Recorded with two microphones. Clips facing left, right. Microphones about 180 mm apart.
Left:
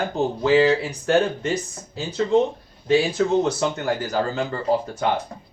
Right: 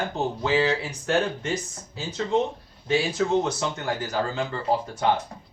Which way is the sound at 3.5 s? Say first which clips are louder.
Left 5 dB; 55° left (ahead or behind).